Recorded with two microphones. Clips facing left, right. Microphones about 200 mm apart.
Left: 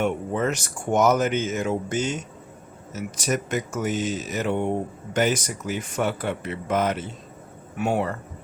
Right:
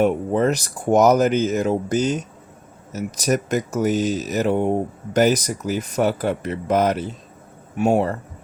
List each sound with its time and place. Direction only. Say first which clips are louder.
0.0 s speech: right 6 dB; 35° right (ahead or behind)